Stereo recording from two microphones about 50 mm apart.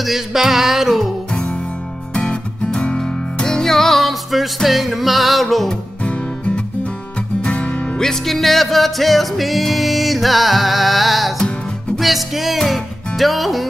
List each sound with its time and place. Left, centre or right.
0.0 s music: centre
2.1 s music: left; by 5.8 s centre
6.0 s music: left
8.0 s music: centre